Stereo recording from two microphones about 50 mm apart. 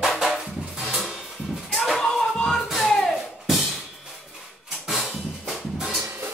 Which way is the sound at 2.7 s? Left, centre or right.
Centre.